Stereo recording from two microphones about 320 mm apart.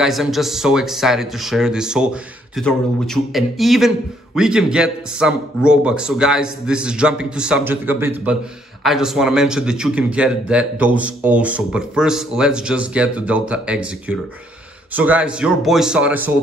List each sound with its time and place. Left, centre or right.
0.0 s speech: centre